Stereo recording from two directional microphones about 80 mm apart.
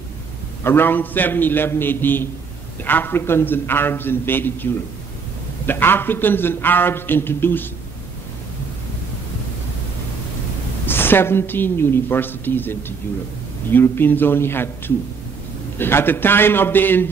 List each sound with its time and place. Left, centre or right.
0.7 s a man's voice: left
5.7 s a man's voice: left
10.9 s a man's voice: left
15.8 s a man's voice: left